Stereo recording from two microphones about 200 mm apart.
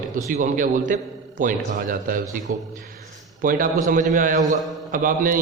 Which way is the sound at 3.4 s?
45° right (ahead or behind).